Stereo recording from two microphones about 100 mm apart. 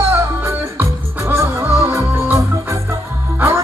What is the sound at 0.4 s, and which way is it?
Music, 25° right (ahead or behind).